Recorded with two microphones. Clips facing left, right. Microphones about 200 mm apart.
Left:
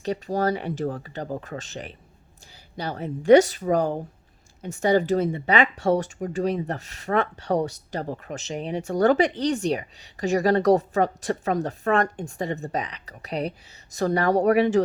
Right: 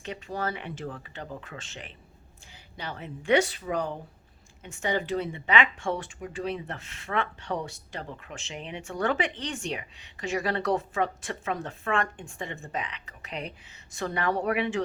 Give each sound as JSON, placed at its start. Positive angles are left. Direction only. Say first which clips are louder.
{"t": 0.0, "sound": "speech", "louder": "left 9 dB", "side_deg": 40}